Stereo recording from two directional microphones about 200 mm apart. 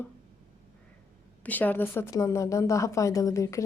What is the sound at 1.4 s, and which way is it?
A woman's voice, 10° left (ahead or behind).